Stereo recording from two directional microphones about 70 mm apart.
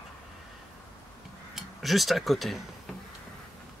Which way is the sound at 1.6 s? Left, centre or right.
Centre.